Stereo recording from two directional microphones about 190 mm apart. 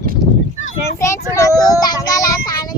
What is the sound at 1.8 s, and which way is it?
Child singing, 20° left (ahead or behind).